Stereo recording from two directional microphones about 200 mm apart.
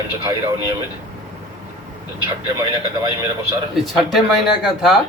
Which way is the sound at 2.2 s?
20° right (ahead or behind).